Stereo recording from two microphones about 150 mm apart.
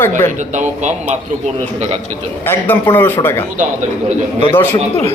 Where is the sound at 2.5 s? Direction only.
15° left (ahead or behind).